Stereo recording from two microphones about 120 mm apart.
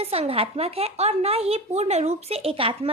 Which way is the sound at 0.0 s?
55° right (ahead or behind).